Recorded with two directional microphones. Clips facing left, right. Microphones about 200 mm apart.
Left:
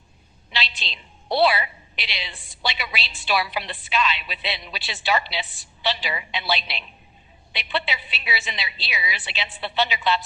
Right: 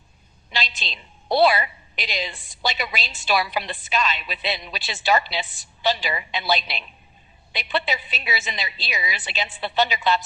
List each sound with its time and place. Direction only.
0.5 s a woman's voice: 45° right (ahead or behind)